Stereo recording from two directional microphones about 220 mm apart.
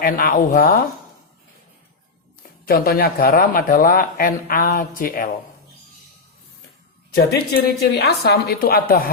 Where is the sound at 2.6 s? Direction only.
40° left (ahead or behind).